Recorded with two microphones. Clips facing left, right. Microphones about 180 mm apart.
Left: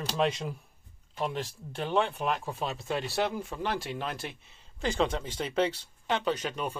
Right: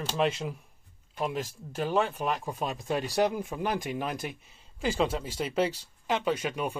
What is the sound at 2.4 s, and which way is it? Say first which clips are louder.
Speech: right 1 dB; 15° right (ahead or behind).